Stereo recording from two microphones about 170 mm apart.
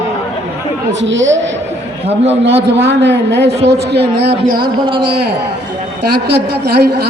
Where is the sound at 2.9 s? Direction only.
90° right.